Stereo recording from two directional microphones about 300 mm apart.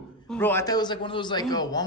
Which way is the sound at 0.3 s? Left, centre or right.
Centre.